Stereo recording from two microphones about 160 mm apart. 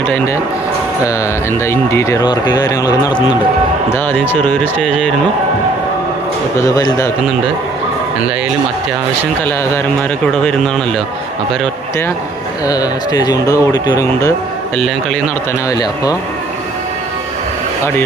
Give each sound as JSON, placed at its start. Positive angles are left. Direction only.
{"t": 1.6, "sound": "speech", "side_deg": 15}
{"t": 3.9, "sound": "speech", "side_deg": 10}
{"t": 6.6, "sound": "speech", "side_deg": 20}
{"t": 10.3, "sound": "speech", "side_deg": 5}
{"t": 12.6, "sound": "speech", "side_deg": 25}
{"t": 15.7, "sound": "speech", "side_deg": 25}